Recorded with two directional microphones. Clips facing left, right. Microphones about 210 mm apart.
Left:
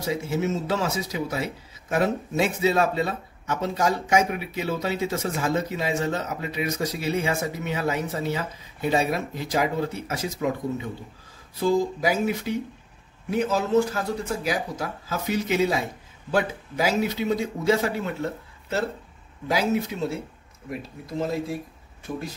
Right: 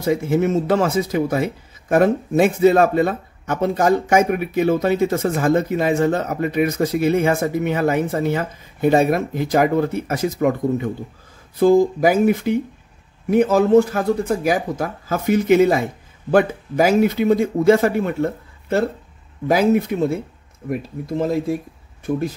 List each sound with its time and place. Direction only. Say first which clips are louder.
0.0 s speech: right 8 dB; 55° right (ahead or behind)